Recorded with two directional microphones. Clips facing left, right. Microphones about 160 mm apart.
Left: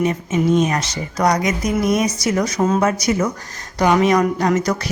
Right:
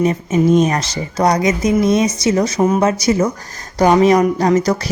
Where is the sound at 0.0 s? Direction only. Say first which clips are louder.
Right 4 dB; 35° right (ahead or behind).